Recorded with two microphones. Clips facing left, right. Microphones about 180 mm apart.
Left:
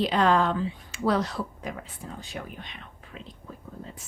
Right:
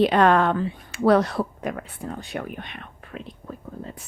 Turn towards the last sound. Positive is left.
turn(degrees=-60)  # may be behind; listen again after turning